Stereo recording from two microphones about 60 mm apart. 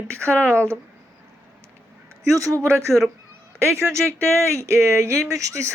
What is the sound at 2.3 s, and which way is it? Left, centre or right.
Speech, right.